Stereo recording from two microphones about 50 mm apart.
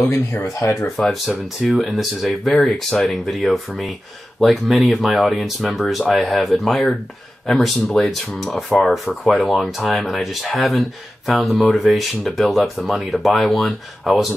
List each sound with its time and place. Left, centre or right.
0.0 s speech: left
0.9 s speech: centre
2.6 s speech: centre
8.8 s speech: centre